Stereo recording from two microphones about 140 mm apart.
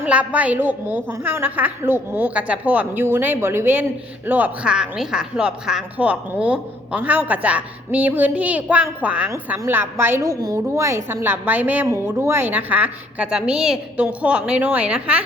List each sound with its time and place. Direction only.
0.0 s a woman's voice: 10° right (ahead or behind)